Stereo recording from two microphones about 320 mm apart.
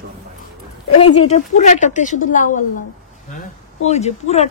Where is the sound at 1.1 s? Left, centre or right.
Left.